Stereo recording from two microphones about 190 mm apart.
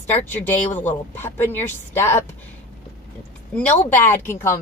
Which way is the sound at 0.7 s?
40° left (ahead or behind).